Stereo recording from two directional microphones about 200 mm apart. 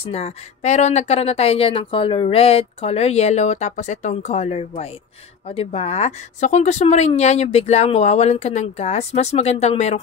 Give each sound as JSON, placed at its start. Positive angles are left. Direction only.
{"t": 0.0, "sound": "speech", "side_deg": 30}